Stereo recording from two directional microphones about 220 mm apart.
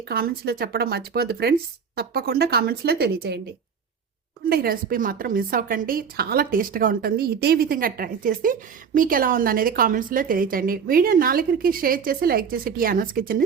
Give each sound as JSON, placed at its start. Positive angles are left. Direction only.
{"t": 0.1, "sound": "a woman's voice", "side_deg": -45}